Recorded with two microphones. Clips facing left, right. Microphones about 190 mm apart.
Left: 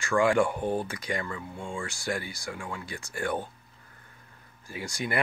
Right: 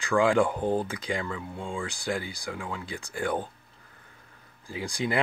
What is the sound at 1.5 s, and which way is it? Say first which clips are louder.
Speech: right 2 dB; 15° right (ahead or behind).